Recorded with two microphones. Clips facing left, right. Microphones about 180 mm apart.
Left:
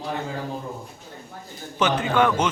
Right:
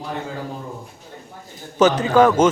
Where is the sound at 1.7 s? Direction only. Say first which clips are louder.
Right 6 dB; 40° right (ahead or behind).